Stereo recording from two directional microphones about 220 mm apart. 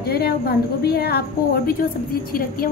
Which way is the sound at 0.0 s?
45° left (ahead or behind).